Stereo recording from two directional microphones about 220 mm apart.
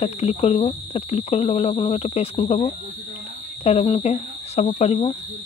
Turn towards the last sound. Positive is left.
turn(degrees=30)  # may be behind; listen again after turning